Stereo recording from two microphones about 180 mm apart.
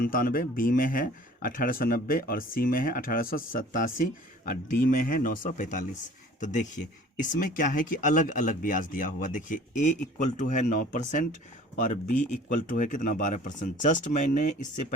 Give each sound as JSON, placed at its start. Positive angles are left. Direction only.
{"t": 0.0, "sound": "speech", "side_deg": 55}